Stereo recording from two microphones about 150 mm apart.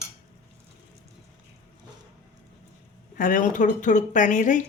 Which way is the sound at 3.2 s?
65° left (ahead or behind).